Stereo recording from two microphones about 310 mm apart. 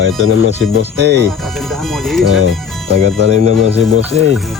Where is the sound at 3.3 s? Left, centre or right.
Right.